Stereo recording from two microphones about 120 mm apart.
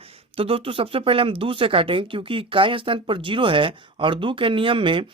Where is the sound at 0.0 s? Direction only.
50° right (ahead or behind).